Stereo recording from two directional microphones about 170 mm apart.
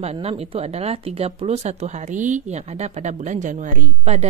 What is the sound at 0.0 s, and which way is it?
Speech, 35° right (ahead or behind).